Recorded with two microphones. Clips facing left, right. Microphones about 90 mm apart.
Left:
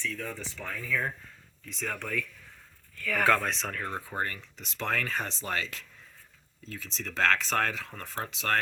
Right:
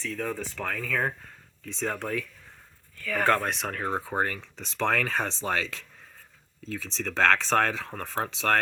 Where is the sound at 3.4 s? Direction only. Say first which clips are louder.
Right 2 dB; 5° right (ahead or behind).